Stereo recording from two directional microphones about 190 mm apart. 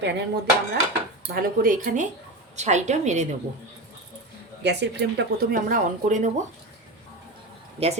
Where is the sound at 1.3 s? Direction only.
45° right (ahead or behind).